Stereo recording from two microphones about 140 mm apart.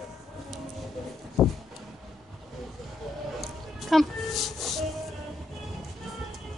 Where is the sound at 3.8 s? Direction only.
Centre (ahead or behind).